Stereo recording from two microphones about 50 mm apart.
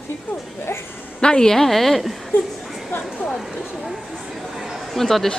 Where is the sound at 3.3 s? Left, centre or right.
Centre.